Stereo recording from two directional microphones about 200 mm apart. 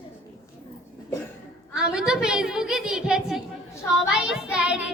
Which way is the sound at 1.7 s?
5° right (ahead or behind).